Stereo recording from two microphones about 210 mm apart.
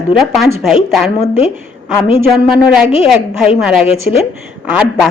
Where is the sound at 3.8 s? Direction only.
30° left (ahead or behind).